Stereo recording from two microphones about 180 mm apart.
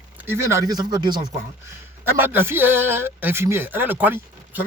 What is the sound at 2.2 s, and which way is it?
Speech, 10° right (ahead or behind).